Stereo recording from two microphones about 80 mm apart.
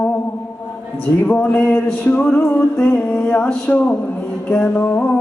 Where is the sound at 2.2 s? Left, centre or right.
Centre.